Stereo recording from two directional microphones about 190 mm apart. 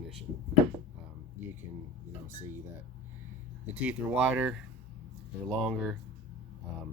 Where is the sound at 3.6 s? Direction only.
10° right (ahead or behind).